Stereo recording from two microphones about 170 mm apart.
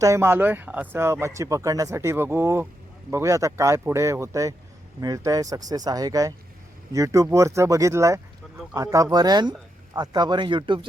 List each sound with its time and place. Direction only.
0.0 s speech: 15° right (ahead or behind)